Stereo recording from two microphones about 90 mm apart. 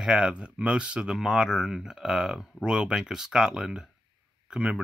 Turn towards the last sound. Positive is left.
turn(degrees=-10)  # may be behind; listen again after turning